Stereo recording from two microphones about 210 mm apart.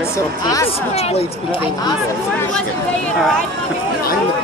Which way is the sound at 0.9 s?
30° left (ahead or behind).